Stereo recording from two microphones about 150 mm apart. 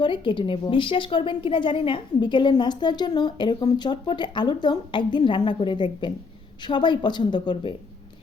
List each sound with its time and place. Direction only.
0.0 s a woman's voice: 35° left (ahead or behind)